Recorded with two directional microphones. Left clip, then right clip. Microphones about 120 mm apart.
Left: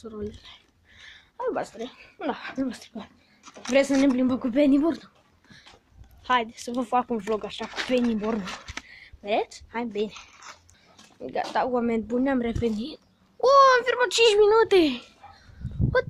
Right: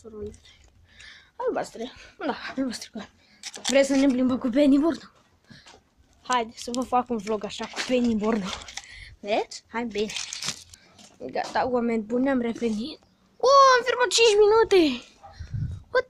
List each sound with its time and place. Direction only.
1.0 s a sound: 5° right (ahead or behind)
2.1 s speech: centre (ahead or behind)
8.2 s speech: 25° right (ahead or behind)
8.8 s speech: 5° right (ahead or behind)
11.1 s speech: centre (ahead or behind)